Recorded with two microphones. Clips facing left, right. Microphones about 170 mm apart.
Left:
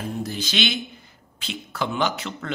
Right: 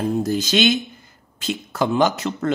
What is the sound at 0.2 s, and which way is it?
A man's voice, 45° right (ahead or behind).